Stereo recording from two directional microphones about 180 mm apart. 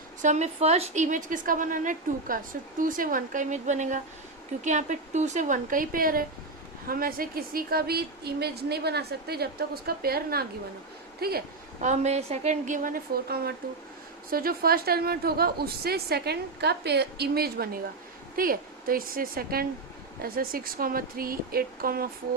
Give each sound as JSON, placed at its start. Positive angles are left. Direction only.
{"t": 0.2, "sound": "a woman's voice", "side_deg": -40}
{"t": 11.9, "sound": "a woman's voice", "side_deg": -40}